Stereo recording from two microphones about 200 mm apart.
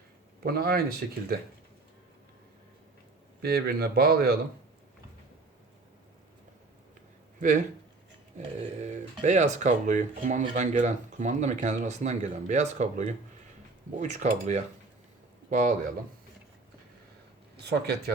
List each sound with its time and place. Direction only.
0.4 s speech: 50° right (ahead or behind)
3.4 s speech: 50° right (ahead or behind)
7.3 s speech: 40° right (ahead or behind)
17.7 s speech: 55° right (ahead or behind)